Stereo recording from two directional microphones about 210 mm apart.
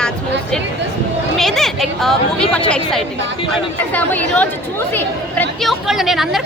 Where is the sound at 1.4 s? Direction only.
Centre (ahead or behind).